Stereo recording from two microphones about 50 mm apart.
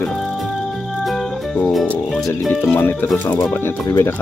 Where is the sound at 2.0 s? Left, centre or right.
Centre.